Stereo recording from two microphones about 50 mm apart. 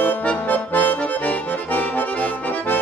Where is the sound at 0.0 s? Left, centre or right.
Left.